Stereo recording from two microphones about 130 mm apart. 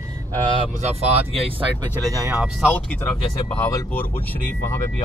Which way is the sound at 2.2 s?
5° right (ahead or behind).